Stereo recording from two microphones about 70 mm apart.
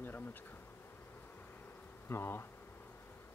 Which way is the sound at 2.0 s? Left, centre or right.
Left.